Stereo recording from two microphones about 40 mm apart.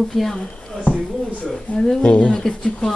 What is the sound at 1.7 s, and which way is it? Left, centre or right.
Speech, centre.